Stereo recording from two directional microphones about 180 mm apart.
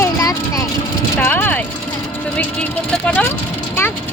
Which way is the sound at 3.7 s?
10° left (ahead or behind).